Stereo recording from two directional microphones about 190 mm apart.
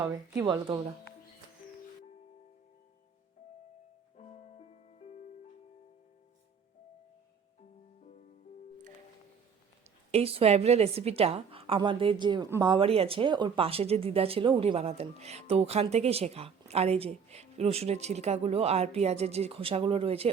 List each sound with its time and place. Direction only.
0.0 s speech: 20° right (ahead or behind)
4.2 s music: 35° left (ahead or behind)
10.1 s speech: 30° right (ahead or behind)